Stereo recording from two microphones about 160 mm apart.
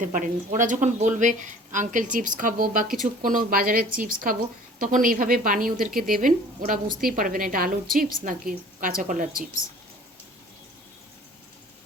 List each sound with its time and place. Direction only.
0.0 s a woman's voice: 55° right (ahead or behind)